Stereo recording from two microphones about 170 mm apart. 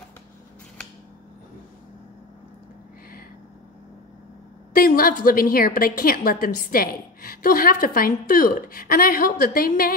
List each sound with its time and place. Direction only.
4.7 s a woman's voice: 60° left (ahead or behind)